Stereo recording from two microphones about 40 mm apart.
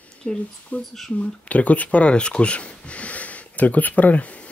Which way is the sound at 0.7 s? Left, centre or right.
Left.